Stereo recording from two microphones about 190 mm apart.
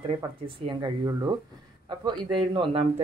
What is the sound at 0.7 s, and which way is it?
Speech, 20° right (ahead or behind).